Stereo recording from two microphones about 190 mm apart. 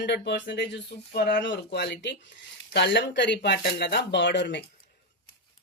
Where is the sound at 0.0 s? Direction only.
65° left (ahead or behind).